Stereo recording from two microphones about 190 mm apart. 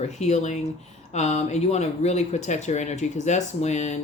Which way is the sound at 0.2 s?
35° left (ahead or behind).